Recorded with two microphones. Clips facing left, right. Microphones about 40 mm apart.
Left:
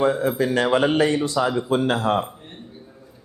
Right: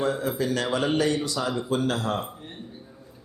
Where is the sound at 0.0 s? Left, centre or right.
Left.